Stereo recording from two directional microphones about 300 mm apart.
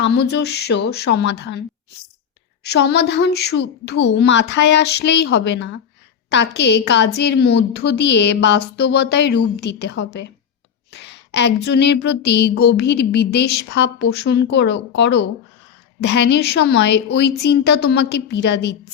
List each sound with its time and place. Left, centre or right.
0.0 s a woman's voice: left
2.6 s a woman's voice: left